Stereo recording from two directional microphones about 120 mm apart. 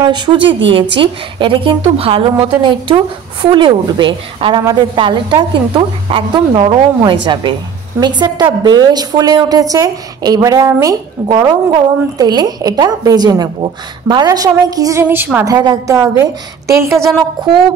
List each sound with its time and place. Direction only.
0.0 s a woman's voice: 40° right (ahead or behind)
15.0 s a woman's voice: 15° right (ahead or behind)
15.4 s a woman's voice: 30° right (ahead or behind)
17.4 s a woman's voice: 40° right (ahead or behind)